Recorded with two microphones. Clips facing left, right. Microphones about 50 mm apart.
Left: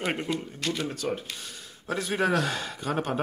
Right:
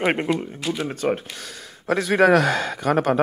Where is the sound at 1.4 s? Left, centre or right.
Right.